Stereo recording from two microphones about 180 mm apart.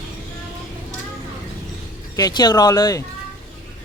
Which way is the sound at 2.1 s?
20° left (ahead or behind).